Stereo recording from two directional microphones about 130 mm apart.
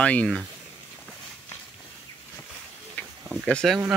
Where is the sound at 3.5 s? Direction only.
5° left (ahead or behind).